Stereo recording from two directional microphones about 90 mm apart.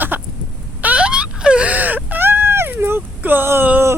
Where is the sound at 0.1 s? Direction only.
20° right (ahead or behind).